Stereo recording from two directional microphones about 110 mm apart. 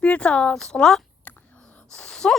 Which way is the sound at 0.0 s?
10° left (ahead or behind).